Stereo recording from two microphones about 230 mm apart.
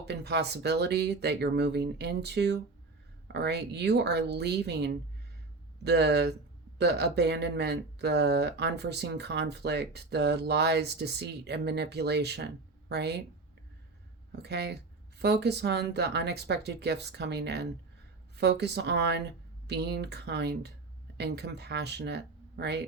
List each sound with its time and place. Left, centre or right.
0.0 s speech: right
14.4 s speech: right